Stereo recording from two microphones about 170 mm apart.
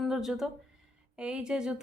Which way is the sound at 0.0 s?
Centre (ahead or behind).